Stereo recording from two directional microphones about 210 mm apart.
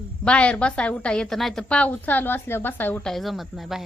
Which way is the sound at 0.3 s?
5° left (ahead or behind).